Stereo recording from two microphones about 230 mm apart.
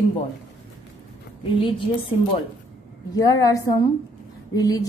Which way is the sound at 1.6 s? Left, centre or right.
Left.